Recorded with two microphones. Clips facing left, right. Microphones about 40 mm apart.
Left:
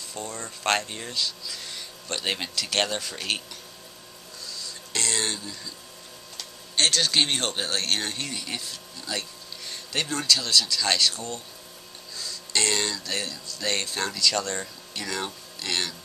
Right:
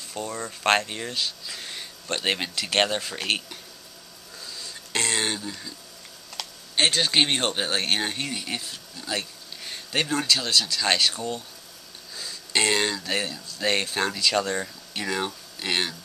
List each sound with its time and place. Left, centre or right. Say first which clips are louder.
0.1 s speech: right 4 dB; centre
4.5 s a sound: right 1 dB; centre
6.7 s speech: right 1 dB; centre